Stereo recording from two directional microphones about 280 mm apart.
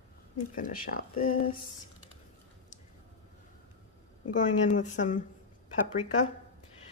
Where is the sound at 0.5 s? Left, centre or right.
Left.